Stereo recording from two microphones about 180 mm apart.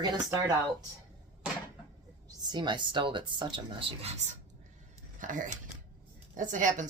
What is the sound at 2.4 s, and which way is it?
Speech, 25° right (ahead or behind).